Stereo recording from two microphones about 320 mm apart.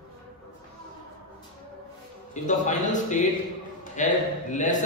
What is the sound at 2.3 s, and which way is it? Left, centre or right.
A man's voice, left.